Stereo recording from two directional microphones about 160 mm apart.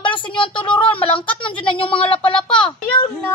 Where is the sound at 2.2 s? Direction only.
5° left (ahead or behind).